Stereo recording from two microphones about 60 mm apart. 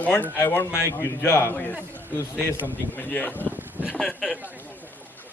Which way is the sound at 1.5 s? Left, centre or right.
Left.